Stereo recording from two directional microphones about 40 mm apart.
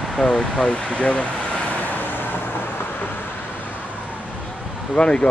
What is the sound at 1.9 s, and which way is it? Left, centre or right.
Vehicle, left.